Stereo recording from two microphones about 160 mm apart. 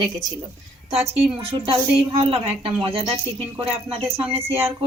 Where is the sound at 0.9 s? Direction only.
40° right (ahead or behind).